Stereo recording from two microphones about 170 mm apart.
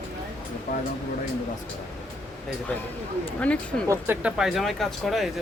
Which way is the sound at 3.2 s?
10° left (ahead or behind).